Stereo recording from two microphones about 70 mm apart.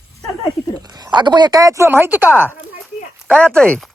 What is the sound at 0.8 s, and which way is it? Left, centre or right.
Speech, right.